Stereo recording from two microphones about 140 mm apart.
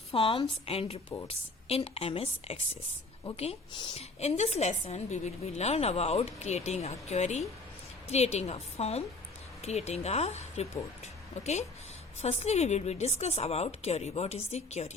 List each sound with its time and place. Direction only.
0.1 s a woman's voice: 40° left (ahead or behind)